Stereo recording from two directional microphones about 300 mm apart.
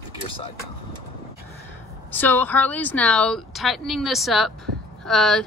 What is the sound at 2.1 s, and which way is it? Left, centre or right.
Speech, centre.